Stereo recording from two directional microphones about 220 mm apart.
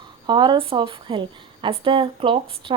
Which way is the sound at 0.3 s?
20° right (ahead or behind).